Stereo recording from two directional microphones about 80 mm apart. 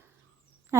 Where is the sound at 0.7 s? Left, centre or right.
Right.